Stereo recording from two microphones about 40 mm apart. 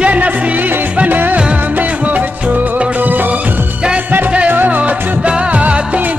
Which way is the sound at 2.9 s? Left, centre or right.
Right.